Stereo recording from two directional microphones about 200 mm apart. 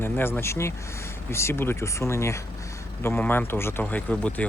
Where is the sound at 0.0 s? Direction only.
10° left (ahead or behind).